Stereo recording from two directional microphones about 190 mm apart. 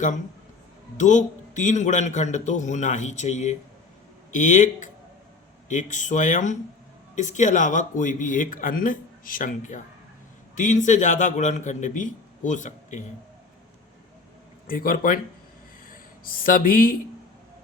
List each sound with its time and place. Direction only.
0.9 s a man's voice: 40° left (ahead or behind)
14.7 s speech: 50° left (ahead or behind)